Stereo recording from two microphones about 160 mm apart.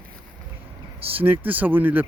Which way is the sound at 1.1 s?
10° right (ahead or behind).